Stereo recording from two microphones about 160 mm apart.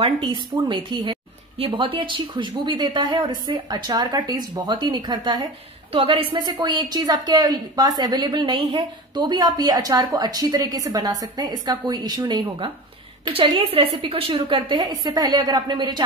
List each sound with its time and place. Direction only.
0.0 s a woman's voice: 30° right (ahead or behind)